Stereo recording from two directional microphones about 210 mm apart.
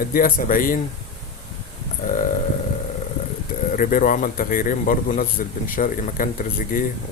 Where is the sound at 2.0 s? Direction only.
40° left (ahead or behind).